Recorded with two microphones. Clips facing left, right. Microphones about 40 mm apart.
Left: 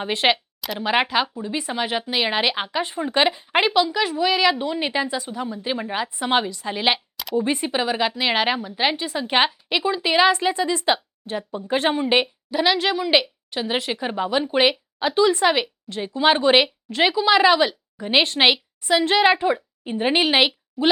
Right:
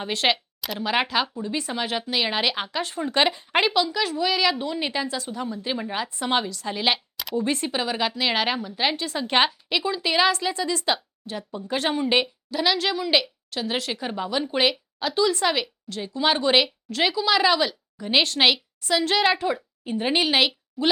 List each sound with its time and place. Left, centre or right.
0.0 s a woman's voice: centre